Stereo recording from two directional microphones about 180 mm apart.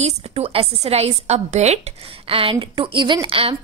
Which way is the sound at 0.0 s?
35° right (ahead or behind).